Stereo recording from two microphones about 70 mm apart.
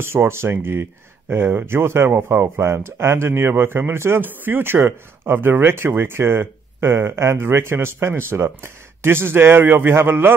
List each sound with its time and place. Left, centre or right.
0.0 s speech: right